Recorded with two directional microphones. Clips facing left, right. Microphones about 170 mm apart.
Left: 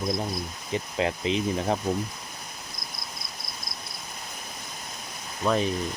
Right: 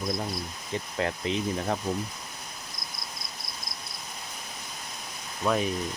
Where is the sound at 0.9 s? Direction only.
15° left (ahead or behind).